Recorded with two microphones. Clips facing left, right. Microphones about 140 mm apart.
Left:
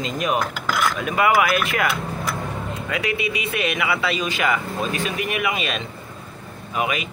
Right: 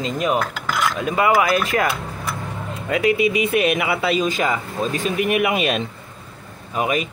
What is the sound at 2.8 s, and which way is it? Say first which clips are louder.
Speech: right 8 dB; 45° right (ahead or behind).